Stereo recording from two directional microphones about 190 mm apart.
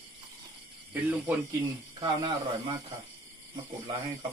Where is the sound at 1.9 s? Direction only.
25° right (ahead or behind).